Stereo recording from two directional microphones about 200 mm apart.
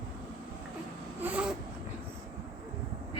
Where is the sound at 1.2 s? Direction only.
5° right (ahead or behind).